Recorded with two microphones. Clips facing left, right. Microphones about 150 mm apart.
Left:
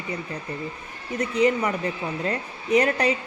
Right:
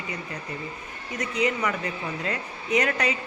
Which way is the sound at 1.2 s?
30° left (ahead or behind).